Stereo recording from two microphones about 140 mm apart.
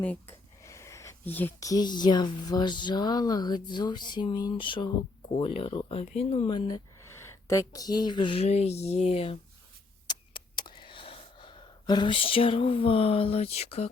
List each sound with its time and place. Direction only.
0.0 s speech: 10° left (ahead or behind)
0.6 s a sound: 20° left (ahead or behind)
1.6 s speech: 30° left (ahead or behind); by 6.5 s 50° left (ahead or behind)
6.5 s speech: 30° left (ahead or behind)
7.0 s speech: 20° left (ahead or behind); by 9.4 s 45° left (ahead or behind)
10.1 s a sound: 35° left (ahead or behind)